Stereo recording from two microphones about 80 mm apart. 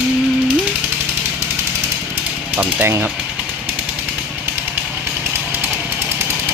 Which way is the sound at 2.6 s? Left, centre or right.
Centre.